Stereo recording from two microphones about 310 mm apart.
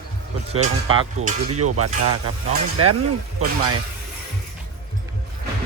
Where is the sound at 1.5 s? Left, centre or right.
Right.